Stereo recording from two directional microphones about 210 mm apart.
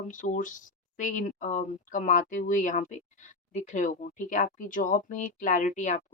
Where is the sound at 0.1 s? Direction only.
40° left (ahead or behind).